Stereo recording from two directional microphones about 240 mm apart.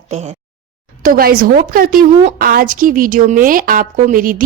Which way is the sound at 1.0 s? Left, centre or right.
Right.